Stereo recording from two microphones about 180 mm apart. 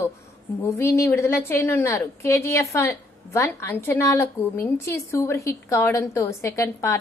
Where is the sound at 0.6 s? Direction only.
15° left (ahead or behind).